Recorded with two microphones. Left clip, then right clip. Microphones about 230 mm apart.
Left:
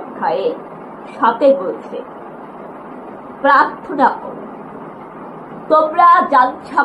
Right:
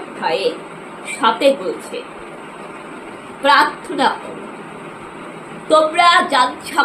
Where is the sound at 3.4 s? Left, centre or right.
Centre.